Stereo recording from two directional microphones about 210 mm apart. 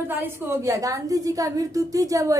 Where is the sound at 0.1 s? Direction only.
10° right (ahead or behind).